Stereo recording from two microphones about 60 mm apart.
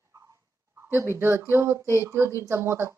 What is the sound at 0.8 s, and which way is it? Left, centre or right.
Speech, right.